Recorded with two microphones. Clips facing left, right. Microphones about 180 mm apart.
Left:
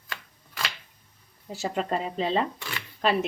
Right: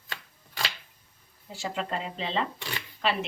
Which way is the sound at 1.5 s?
40° left (ahead or behind).